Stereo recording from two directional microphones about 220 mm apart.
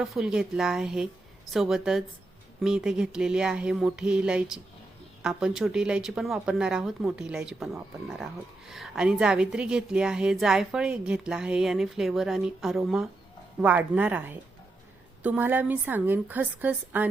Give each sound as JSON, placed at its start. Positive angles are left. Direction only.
{"t": 0.0, "sound": "a woman's voice", "side_deg": 0}